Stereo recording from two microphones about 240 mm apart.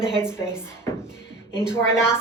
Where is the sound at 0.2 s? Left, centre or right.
Centre.